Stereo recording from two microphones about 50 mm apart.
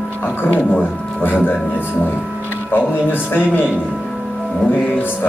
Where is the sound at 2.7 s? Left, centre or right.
Left.